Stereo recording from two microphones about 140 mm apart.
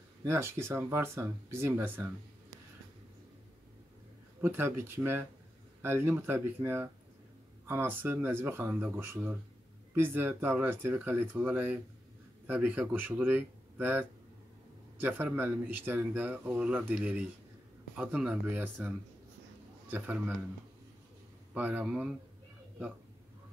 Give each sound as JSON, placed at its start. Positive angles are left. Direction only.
{"t": 0.2, "sound": "speech", "side_deg": -20}
{"t": 4.4, "sound": "speech", "side_deg": -15}
{"t": 19.9, "sound": "speech", "side_deg": -10}
{"t": 21.5, "sound": "speech", "side_deg": -10}